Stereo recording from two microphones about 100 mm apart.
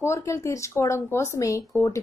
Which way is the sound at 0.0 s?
30° left (ahead or behind).